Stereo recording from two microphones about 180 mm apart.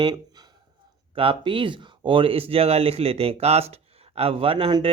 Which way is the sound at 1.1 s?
30° right (ahead or behind).